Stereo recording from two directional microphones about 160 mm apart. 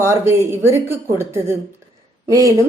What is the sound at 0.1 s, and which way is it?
A woman's voice, 15° right (ahead or behind).